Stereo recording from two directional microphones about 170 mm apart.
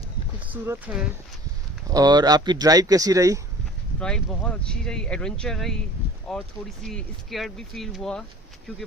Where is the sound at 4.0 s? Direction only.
5° left (ahead or behind).